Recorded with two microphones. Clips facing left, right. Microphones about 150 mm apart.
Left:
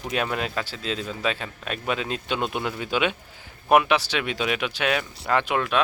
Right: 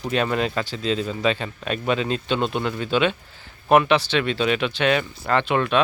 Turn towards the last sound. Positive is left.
turn(degrees=5)  # may be behind; listen again after turning